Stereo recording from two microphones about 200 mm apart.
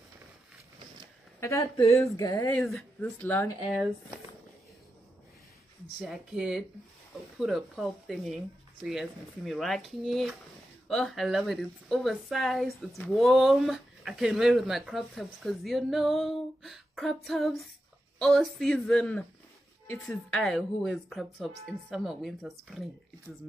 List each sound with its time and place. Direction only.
1.4 s speech: 15° left (ahead or behind)
2.6 s speech: 5° left (ahead or behind)
5.9 s speech: centre (ahead or behind)